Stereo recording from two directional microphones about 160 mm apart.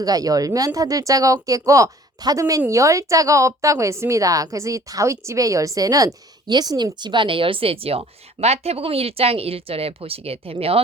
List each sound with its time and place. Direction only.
0.0 s a woman's voice: 25° right (ahead or behind)